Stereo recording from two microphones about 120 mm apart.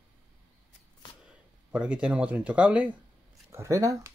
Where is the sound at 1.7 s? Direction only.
10° right (ahead or behind).